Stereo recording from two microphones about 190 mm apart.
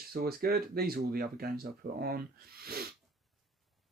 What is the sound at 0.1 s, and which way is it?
Speech, 50° right (ahead or behind).